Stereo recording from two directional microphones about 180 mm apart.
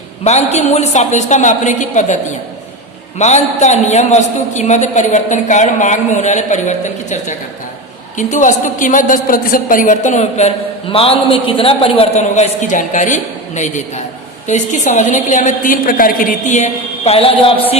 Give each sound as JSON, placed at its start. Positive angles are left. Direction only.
{"t": 0.3, "sound": "a man's voice", "side_deg": 40}
{"t": 3.2, "sound": "a man's voice", "side_deg": 40}